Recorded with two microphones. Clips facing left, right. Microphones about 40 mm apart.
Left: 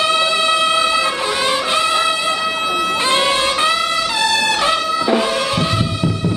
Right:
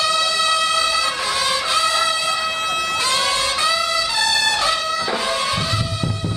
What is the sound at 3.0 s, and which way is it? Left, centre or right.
Music, left.